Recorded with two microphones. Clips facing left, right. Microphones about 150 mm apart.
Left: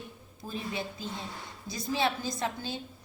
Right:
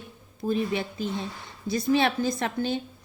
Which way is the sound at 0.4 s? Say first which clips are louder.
Right 9 dB; 70° right (ahead or behind).